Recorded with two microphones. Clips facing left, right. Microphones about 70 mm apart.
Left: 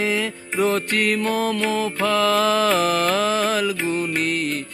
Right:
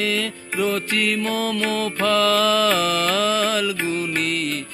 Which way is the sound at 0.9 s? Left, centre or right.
Left.